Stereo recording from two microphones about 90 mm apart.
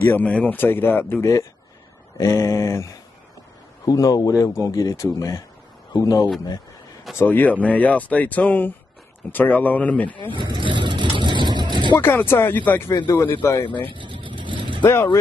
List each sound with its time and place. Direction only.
0.0 s speech: 15° left (ahead or behind); by 6.2 s 45° left (ahead or behind)
7.2 s speech: 20° left (ahead or behind)
10.3 s vehicle: 60° right (ahead or behind)
12.0 s speech: 25° left (ahead or behind)
13.8 s vehicle: 70° right (ahead or behind)